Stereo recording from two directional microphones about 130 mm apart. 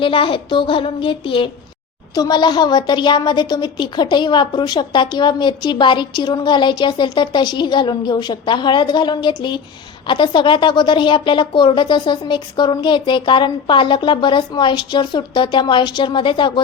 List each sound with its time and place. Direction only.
0.0 s a woman's voice: 40° left (ahead or behind)